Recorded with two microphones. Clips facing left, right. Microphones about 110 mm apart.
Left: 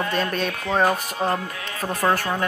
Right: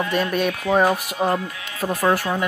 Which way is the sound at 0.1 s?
15° right (ahead or behind).